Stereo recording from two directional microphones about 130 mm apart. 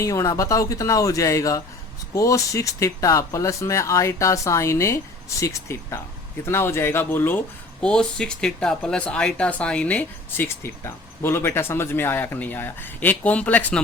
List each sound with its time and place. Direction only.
0.0 s speech: 25° left (ahead or behind)